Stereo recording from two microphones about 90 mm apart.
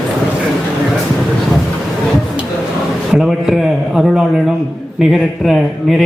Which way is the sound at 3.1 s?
5° right (ahead or behind).